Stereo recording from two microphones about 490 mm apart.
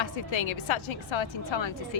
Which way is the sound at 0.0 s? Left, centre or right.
Left.